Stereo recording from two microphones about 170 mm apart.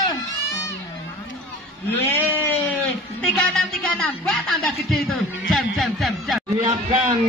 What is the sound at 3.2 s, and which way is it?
Speech, 5° left (ahead or behind).